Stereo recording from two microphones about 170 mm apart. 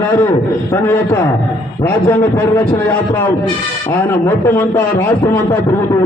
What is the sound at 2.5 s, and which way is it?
Speech, 10° left (ahead or behind).